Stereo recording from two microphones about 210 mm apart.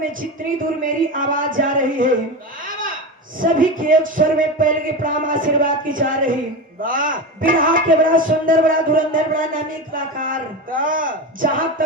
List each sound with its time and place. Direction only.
0.9 s a man's voice: 40° right (ahead or behind)
3.4 s a man's voice: 40° right (ahead or behind)